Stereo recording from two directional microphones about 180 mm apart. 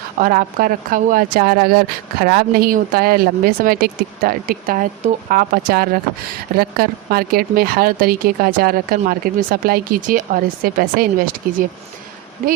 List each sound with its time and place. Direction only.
0.2 s speech: 50° right (ahead or behind)